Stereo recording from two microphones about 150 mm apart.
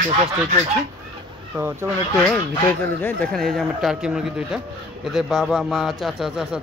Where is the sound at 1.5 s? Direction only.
15° right (ahead or behind).